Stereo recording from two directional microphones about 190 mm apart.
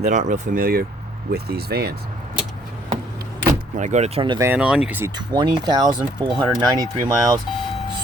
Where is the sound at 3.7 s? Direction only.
40° right (ahead or behind).